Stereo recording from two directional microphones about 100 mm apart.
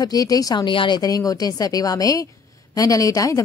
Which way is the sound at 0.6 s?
55° left (ahead or behind).